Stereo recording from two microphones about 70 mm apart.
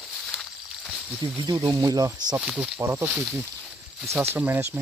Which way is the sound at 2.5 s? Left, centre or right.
Centre.